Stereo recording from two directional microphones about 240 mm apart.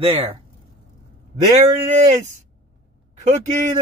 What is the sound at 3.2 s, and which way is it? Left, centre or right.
Speech, right.